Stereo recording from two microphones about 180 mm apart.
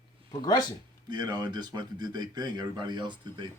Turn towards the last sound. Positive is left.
turn(degrees=-25)  # may be behind; listen again after turning